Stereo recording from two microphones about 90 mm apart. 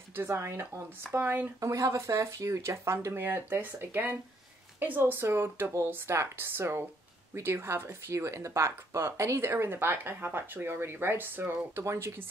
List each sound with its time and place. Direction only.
0.1 s speech: 30° right (ahead or behind)
1.6 s speech: 40° right (ahead or behind)